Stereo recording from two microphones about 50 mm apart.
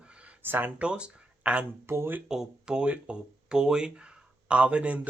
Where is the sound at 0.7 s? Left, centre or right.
Right.